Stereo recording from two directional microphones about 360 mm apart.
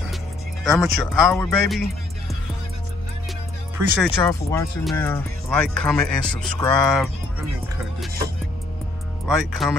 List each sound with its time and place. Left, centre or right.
0.7 s speech: centre
3.7 s speech: centre
9.6 s speech: centre